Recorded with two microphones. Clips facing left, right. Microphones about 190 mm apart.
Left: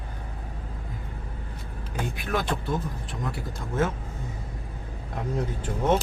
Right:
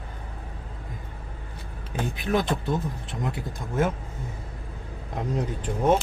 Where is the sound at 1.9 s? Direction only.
20° right (ahead or behind).